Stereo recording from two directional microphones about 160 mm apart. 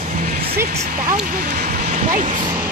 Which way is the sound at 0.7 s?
55° right (ahead or behind).